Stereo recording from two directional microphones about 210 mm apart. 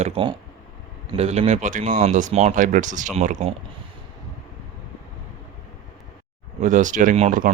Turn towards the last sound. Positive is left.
turn(degrees=-35)  # may be behind; listen again after turning